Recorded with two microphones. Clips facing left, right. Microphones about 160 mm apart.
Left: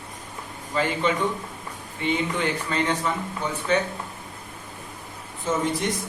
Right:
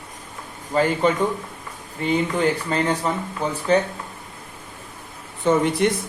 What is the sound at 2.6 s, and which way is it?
Speech, 35° right (ahead or behind).